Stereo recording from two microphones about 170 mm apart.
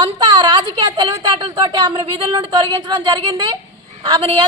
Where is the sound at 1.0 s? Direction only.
25° right (ahead or behind).